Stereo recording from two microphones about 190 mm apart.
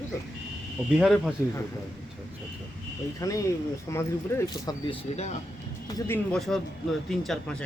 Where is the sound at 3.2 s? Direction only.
15° left (ahead or behind).